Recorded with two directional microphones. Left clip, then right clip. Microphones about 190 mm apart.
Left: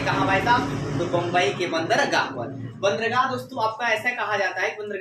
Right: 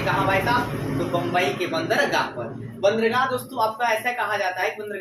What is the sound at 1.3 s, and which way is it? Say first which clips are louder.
Speech: even; 25° left (ahead or behind).